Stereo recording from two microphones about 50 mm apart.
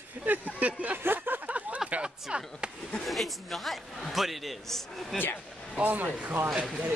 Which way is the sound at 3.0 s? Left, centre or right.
Centre.